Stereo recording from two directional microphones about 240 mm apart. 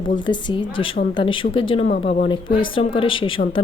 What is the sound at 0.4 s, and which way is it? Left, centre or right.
A woman's voice, left.